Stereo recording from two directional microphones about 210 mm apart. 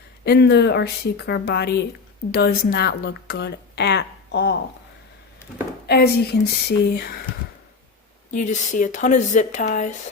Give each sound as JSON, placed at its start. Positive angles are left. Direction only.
{"t": 0.3, "sound": "a woman's voice", "side_deg": 50}
{"t": 5.8, "sound": "a woman's voice", "side_deg": 50}
{"t": 8.3, "sound": "speech", "side_deg": 40}